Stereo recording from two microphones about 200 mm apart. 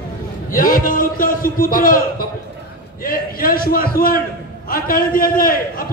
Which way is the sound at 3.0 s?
45° left (ahead or behind).